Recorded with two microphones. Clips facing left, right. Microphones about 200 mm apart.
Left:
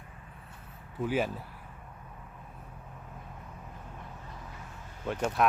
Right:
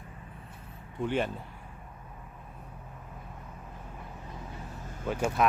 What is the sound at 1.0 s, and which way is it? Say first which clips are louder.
Speech: even; 5° left (ahead or behind).